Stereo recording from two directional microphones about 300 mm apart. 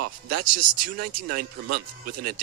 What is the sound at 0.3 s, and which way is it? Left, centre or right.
Speech, right.